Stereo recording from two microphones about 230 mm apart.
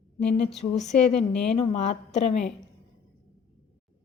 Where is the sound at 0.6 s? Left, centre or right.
Left.